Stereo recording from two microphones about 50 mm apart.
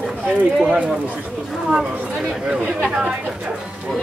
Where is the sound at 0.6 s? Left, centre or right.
Right.